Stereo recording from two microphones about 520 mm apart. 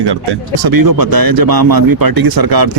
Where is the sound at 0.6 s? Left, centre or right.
Right.